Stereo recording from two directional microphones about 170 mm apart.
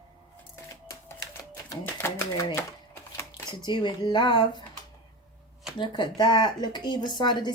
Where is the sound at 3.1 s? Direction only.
20° left (ahead or behind).